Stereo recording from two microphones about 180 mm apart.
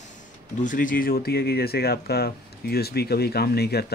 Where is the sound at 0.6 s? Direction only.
45° left (ahead or behind); by 3.8 s 65° left (ahead or behind).